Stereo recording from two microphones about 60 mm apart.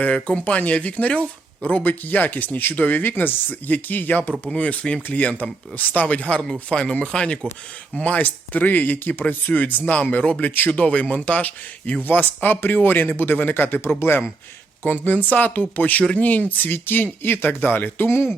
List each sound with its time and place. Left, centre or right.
0.0 s speech: left